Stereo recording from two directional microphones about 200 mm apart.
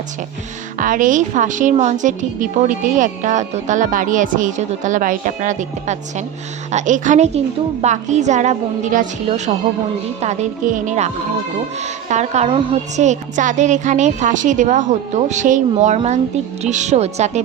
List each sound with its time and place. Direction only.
0.8 s a woman's voice: 40° right (ahead or behind)